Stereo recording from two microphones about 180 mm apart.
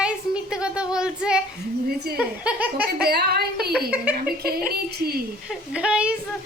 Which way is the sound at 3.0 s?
60° right (ahead or behind).